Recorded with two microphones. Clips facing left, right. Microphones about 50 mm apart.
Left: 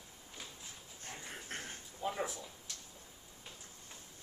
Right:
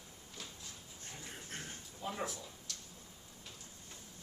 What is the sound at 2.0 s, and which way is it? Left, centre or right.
Speech, centre.